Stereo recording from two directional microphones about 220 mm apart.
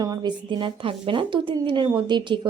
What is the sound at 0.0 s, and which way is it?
A woman's voice, 20° right (ahead or behind).